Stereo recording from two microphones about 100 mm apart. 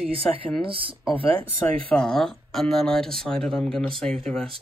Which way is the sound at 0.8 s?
65° right (ahead or behind).